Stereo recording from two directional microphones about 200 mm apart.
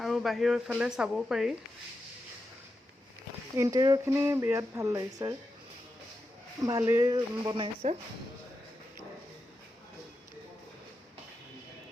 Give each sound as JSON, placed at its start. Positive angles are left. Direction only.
{"t": 0.0, "sound": "speech", "side_deg": 0}
{"t": 3.6, "sound": "speech", "side_deg": -15}
{"t": 6.7, "sound": "speech", "side_deg": -15}